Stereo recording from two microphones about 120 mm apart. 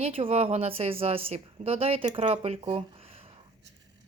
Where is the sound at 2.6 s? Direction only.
45° right (ahead or behind).